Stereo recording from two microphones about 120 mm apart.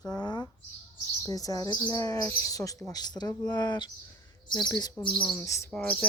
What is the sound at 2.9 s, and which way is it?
Speech, 35° left (ahead or behind).